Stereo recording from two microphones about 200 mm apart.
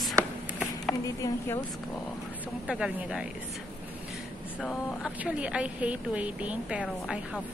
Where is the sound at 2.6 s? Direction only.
5° right (ahead or behind).